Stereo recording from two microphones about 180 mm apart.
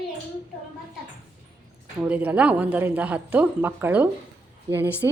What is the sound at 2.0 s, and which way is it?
A woman's voice, 10° right (ahead or behind).